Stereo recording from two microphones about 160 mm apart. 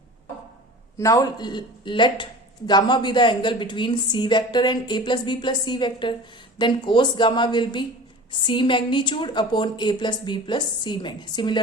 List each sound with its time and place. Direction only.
0.9 s a woman's voice: 20° left (ahead or behind)